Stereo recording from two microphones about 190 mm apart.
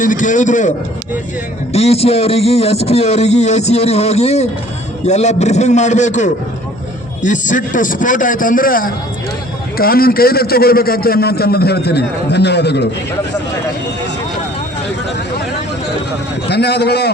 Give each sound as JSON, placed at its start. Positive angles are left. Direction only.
{"t": 0.0, "sound": "a man's voice", "side_deg": 45}
{"t": 1.7, "sound": "a man's voice", "side_deg": 35}
{"t": 16.5, "sound": "a man's voice", "side_deg": 60}